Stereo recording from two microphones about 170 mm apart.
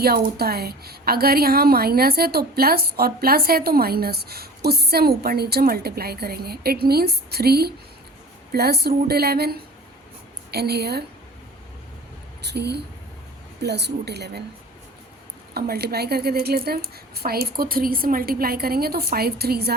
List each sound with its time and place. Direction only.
0.0 s a woman's voice: 65° right (ahead or behind)
12.4 s a woman's voice: 75° right (ahead or behind)
15.5 s a woman's voice: 65° right (ahead or behind)